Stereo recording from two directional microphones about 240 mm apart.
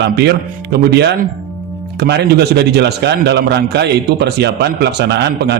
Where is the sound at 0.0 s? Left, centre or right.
Right.